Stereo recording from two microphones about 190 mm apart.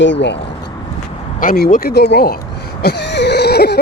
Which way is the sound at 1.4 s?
50° left (ahead or behind).